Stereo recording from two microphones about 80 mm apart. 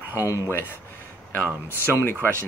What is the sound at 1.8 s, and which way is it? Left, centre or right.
Speech, left.